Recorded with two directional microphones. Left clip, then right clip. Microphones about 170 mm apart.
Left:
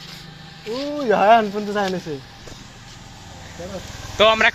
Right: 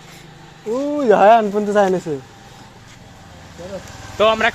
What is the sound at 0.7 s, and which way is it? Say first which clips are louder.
Speech: right 5 dB; 50° right (ahead or behind).